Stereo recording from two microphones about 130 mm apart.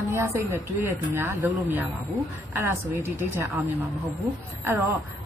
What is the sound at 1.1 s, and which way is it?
A woman's voice, 15° right (ahead or behind).